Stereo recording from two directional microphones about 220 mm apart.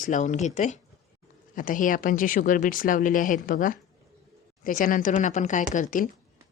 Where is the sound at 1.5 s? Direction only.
40° left (ahead or behind).